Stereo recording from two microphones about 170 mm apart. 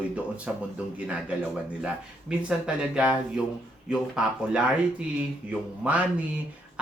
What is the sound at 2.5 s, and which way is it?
Speech, 5° right (ahead or behind).